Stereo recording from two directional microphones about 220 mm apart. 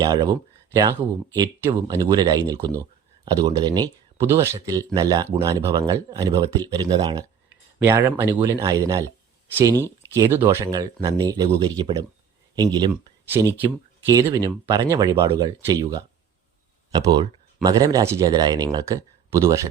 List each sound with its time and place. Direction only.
0.0 s speech: 20° right (ahead or behind)